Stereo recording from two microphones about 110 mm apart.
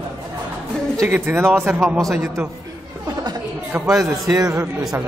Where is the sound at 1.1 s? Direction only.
20° right (ahead or behind).